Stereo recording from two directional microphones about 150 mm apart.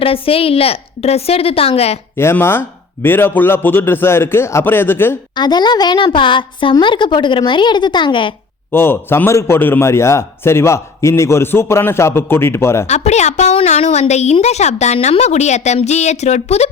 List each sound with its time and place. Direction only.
0.0 s a woman's voice: 40° left (ahead or behind)
2.1 s a man's voice: 15° left (ahead or behind)
5.3 s a woman's voice: 30° left (ahead or behind)
8.7 s a man's voice: 15° left (ahead or behind)
12.9 s a woman's voice: 50° left (ahead or behind)